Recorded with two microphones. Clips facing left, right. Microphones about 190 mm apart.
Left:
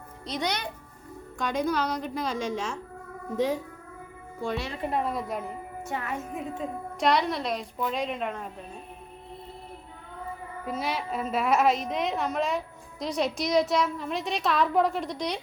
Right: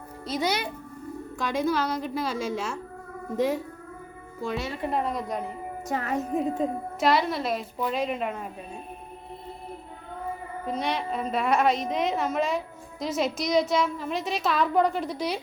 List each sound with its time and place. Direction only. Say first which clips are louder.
0.3 s a woman's voice: right 3 dB; 5° right (ahead or behind)
4.4 s a woman's voice: right 1 dB; centre (ahead or behind)
5.9 s a woman's voice: right 6 dB; 40° right (ahead or behind)
7.0 s a woman's voice: right 1 dB; centre (ahead or behind)
10.8 s a woman's voice: right 2 dB; 5° left (ahead or behind)